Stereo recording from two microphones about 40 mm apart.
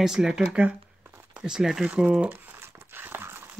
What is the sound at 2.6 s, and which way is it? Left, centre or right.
Dog, right.